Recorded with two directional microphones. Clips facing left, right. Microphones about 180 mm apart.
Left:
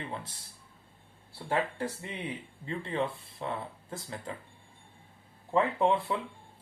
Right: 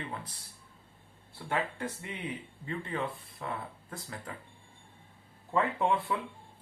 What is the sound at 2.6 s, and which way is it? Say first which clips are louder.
Speech: left 3 dB; 30° left (ahead or behind).